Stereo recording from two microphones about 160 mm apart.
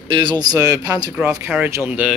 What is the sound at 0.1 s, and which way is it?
Speech, 30° right (ahead or behind).